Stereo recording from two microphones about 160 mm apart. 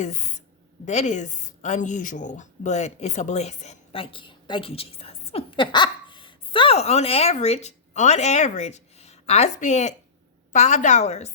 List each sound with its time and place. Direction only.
0.0 s a woman's voice: 50° left (ahead or behind)